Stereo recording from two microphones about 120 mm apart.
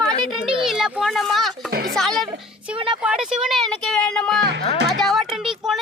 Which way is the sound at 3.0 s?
5° right (ahead or behind).